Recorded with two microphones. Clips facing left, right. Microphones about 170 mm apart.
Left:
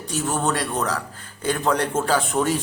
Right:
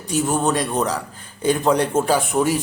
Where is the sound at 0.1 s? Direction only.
15° right (ahead or behind).